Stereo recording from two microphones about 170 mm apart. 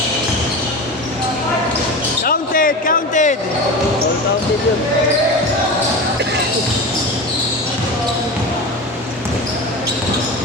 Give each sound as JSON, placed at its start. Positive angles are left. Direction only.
{"t": 2.2, "sound": "basketball bounce", "side_deg": 55}